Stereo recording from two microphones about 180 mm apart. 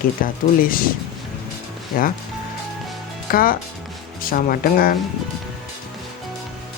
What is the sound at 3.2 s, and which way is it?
Speech, 55° left (ahead or behind).